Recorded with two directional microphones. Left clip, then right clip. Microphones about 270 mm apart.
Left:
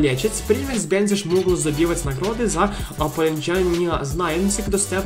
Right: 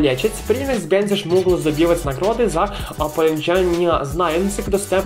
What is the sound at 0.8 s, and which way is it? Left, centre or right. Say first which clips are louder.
Speech: right 2 dB; left.